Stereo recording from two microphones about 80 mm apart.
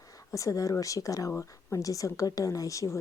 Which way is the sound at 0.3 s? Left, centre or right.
Left.